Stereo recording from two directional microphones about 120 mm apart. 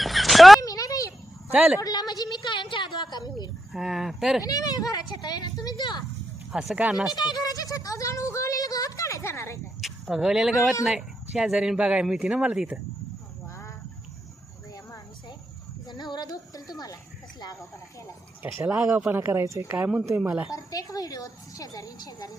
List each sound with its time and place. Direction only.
0.0 s a sound: centre (ahead or behind)
0.6 s a sound: 30° left (ahead or behind)
1.5 s speech: 5° right (ahead or behind)
1.8 s a sound: 35° left (ahead or behind)
3.7 s speech: centre (ahead or behind)
4.4 s a woman's voice: 30° left (ahead or behind)
6.5 s speech: 5° right (ahead or behind)
7.2 s speech: 35° left (ahead or behind)
9.8 s speech: 5° right (ahead or behind)
15.9 s speech: centre (ahead or behind)
16.1 s a woman's voice: 35° left (ahead or behind)
18.6 s speech: 10° right (ahead or behind)
19.7 s speech: 10° right (ahead or behind)
20.5 s a woman's voice: 30° left (ahead or behind)